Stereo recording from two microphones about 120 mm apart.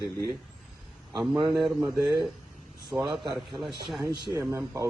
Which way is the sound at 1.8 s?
25° right (ahead or behind).